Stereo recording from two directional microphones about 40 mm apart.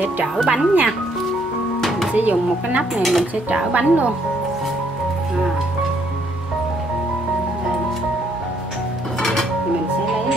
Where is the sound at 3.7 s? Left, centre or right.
Right.